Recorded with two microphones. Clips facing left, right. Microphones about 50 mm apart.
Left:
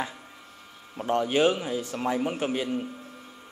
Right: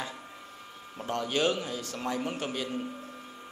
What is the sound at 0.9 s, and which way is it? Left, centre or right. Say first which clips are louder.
A man's voice: left 6 dB; centre.